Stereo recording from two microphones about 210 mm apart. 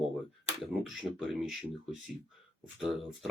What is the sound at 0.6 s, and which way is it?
Speech, centre (ahead or behind).